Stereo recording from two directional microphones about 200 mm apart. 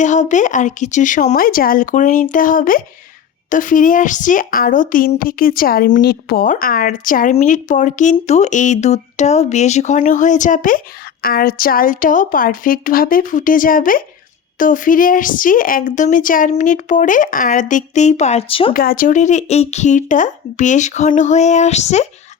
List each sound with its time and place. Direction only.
0.0 s a woman's voice: 40° left (ahead or behind)
18.7 s a woman's voice: 45° left (ahead or behind)